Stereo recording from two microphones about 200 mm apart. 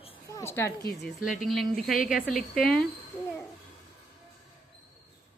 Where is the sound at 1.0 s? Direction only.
Centre (ahead or behind).